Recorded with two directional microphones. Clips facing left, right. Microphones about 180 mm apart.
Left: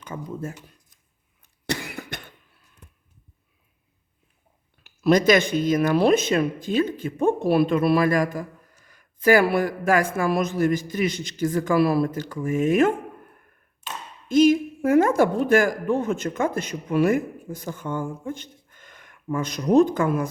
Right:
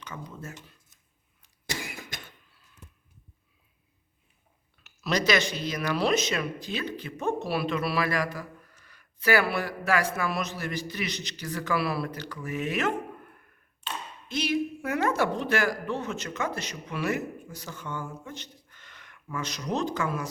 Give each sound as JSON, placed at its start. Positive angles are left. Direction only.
{"t": 0.1, "sound": "speech", "side_deg": 30}
{"t": 1.6, "sound": "cough", "side_deg": 60}
{"t": 4.9, "sound": "speech", "side_deg": 50}